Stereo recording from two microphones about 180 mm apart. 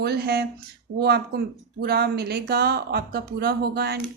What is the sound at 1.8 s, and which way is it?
Speech, 60° right (ahead or behind).